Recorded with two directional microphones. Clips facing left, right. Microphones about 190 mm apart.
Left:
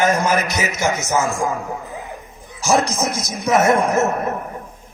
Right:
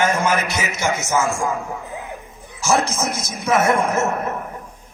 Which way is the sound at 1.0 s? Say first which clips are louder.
Left 1 dB; 15° left (ahead or behind).